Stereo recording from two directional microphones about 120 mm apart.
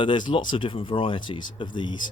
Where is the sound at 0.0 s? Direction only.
40° left (ahead or behind).